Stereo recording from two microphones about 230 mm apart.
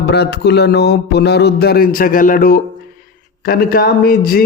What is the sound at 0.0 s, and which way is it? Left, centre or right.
Speech, left.